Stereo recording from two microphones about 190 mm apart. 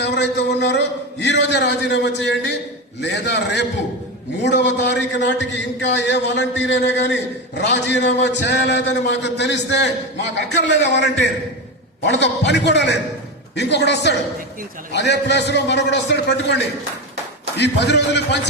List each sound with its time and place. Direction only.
0.0 s a man's voice: 65° left (ahead or behind)